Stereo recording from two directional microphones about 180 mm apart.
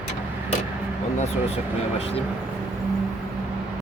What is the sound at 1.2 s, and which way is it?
Speech, 35° left (ahead or behind).